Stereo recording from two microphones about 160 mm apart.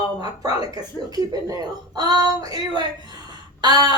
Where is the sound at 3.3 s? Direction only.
25° right (ahead or behind).